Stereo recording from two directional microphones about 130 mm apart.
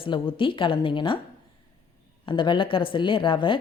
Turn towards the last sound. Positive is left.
turn(degrees=40)  # may be behind; listen again after turning